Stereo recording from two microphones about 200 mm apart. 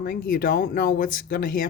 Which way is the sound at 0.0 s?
45° left (ahead or behind).